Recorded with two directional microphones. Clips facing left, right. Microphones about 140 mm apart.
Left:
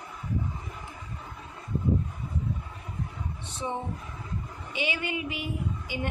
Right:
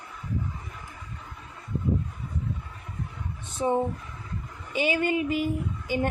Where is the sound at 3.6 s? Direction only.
40° right (ahead or behind).